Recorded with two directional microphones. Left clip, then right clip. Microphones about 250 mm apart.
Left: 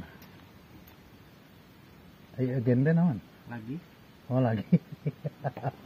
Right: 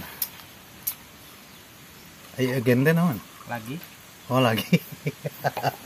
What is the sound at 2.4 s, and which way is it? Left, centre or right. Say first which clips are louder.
Speech: right 6 dB; centre.